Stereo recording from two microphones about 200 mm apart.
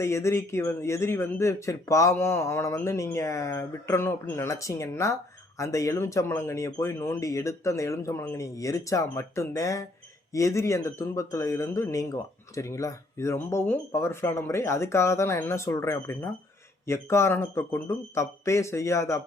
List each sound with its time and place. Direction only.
0.0 s speech: 15° left (ahead or behind)